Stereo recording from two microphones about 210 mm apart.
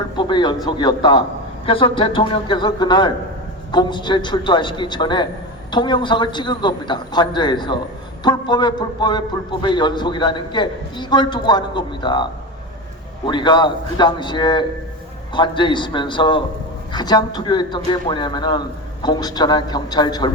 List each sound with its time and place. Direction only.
0.2 s a man's voice: 20° left (ahead or behind)